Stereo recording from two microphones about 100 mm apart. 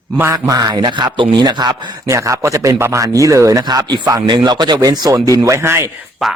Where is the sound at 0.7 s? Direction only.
50° right (ahead or behind).